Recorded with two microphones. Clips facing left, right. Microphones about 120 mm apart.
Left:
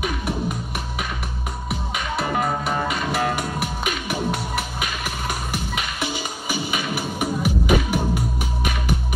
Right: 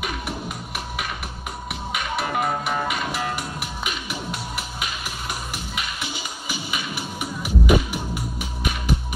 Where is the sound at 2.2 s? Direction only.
40° left (ahead or behind).